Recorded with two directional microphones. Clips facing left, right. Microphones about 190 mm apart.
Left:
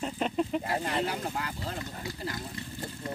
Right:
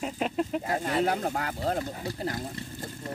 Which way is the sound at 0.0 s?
5° right (ahead or behind).